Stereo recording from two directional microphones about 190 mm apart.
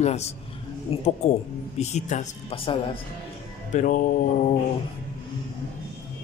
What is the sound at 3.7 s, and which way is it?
Speech, 40° left (ahead or behind).